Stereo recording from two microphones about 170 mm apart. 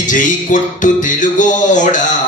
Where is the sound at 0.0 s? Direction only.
50° left (ahead or behind).